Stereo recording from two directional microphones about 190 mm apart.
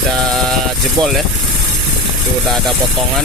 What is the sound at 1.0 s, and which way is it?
Speech, 20° right (ahead or behind).